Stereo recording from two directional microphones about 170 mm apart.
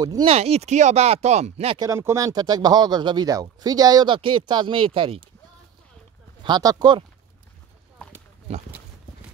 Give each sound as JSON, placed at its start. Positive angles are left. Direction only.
{"t": 0.0, "sound": "speech", "side_deg": -20}
{"t": 0.3, "sound": "speech", "side_deg": -40}
{"t": 1.8, "sound": "speech", "side_deg": -15}
{"t": 6.4, "sound": "speech", "side_deg": -25}